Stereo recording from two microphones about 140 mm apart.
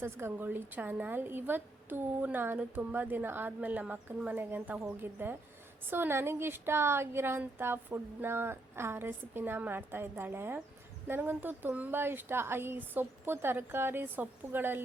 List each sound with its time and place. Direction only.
0.0 s a woman's voice: 15° right (ahead or behind)